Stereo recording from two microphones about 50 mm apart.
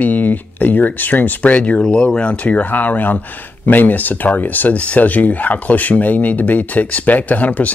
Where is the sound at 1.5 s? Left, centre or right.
Left.